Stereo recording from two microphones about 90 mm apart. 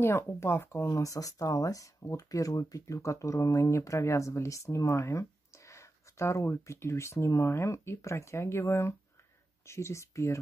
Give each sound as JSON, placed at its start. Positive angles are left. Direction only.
{"t": 0.0, "sound": "speech", "side_deg": 25}